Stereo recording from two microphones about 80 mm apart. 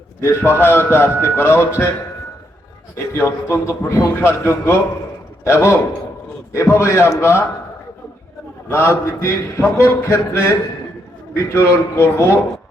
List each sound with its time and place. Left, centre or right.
0.2 s speech: left
3.1 s speech: left
8.7 s speech: left